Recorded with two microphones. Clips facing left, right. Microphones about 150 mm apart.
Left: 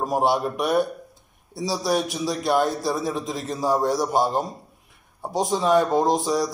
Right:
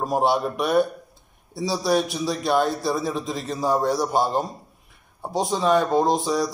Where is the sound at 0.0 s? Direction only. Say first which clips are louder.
Even; 10° left (ahead or behind).